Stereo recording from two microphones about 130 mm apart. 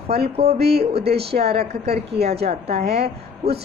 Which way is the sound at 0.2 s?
50° right (ahead or behind).